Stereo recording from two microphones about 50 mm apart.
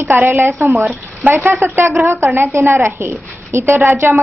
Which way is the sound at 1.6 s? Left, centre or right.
Right.